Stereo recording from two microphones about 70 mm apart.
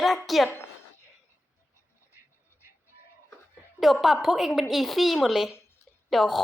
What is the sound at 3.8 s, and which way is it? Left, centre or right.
A woman's voice, centre.